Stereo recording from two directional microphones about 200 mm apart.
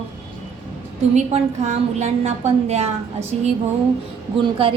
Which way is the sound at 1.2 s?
35° right (ahead or behind).